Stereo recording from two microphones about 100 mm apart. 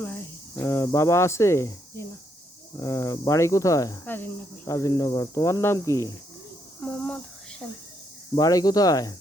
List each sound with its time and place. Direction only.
0.0 s cricket: 20° left (ahead or behind)
0.9 s speech: 30° left (ahead or behind)
4.0 s speech: 20° left (ahead or behind)
4.6 s speech: 35° left (ahead or behind)
6.8 s a sound: 10° left (ahead or behind)
8.4 s speech: 35° left (ahead or behind)